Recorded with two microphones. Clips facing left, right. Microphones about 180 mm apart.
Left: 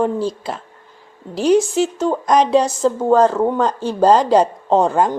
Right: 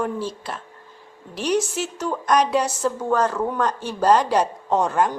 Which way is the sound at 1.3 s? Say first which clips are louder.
Left 8 dB; 30° left (ahead or behind).